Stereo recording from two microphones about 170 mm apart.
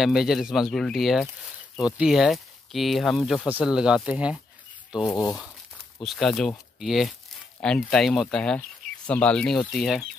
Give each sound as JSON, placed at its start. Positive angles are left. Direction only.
{"t": 0.0, "sound": "speech", "side_deg": 0}
{"t": 5.0, "sound": "speech", "side_deg": 20}
{"t": 5.9, "sound": "speech", "side_deg": 0}